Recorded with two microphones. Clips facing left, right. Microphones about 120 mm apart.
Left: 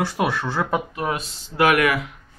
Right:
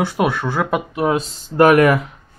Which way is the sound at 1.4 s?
45° right (ahead or behind).